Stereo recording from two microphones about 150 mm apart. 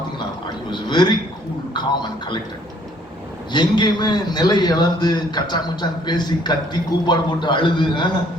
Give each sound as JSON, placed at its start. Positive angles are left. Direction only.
{"t": 0.7, "sound": "a man's voice", "side_deg": 30}
{"t": 3.5, "sound": "a man's voice", "side_deg": 30}